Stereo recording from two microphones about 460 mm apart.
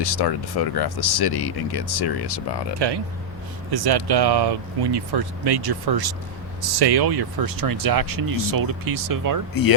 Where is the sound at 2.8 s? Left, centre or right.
Right.